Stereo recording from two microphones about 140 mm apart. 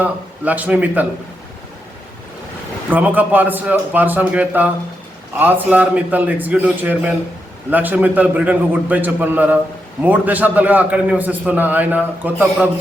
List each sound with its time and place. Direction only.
0.0 s a man's voice: 10° right (ahead or behind)
2.9 s a man's voice: 10° right (ahead or behind)